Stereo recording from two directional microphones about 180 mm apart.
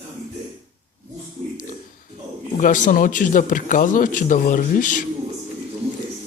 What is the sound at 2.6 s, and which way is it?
A man's voice, 45° left (ahead or behind).